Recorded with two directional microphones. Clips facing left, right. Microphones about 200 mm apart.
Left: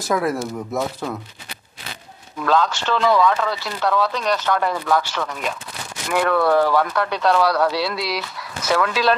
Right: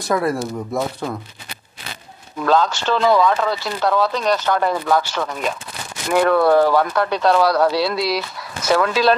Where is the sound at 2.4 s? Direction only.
35° right (ahead or behind).